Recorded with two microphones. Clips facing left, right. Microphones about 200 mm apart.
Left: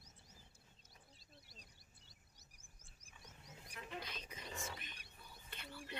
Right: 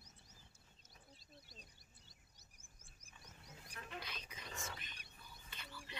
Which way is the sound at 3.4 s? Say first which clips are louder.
Left 1 dB; 20° left (ahead or behind).